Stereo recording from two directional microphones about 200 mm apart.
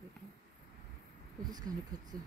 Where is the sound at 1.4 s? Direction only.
20° right (ahead or behind).